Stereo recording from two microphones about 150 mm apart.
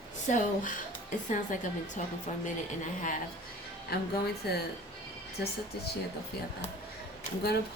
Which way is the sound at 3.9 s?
90° left.